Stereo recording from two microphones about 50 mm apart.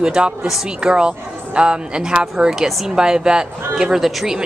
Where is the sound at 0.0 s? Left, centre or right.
Centre.